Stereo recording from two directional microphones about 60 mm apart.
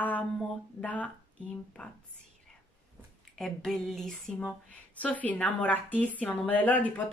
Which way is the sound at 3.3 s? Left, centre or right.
Centre.